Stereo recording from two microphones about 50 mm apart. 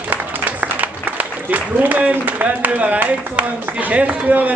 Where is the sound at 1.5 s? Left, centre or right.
Right.